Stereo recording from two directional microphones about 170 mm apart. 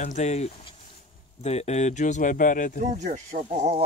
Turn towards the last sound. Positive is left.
turn(degrees=-40)  # may be behind; listen again after turning